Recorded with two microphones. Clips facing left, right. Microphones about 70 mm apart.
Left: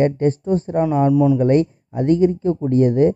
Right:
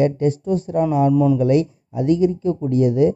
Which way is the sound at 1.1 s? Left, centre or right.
Centre.